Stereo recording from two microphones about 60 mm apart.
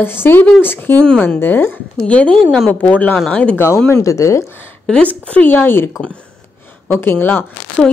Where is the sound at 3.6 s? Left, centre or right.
Left.